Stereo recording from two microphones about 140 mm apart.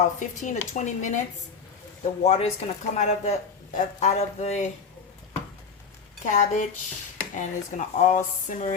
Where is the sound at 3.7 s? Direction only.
70° left (ahead or behind).